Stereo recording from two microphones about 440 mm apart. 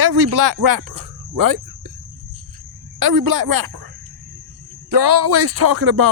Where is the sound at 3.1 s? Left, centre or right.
Right.